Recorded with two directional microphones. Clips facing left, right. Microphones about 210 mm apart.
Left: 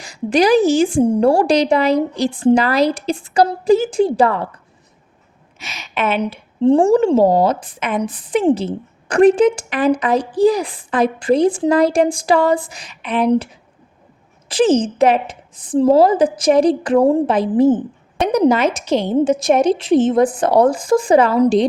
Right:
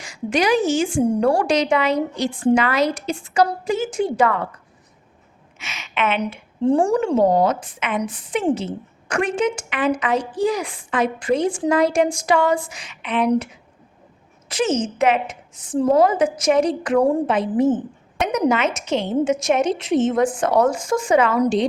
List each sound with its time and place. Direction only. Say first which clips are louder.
0.0 s a woman's voice: left 5 dB; 35° left (ahead or behind)
5.5 s a woman's voice: left 2 dB; 35° left (ahead or behind)